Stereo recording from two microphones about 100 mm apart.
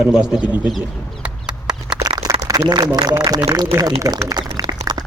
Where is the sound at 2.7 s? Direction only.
45° right (ahead or behind).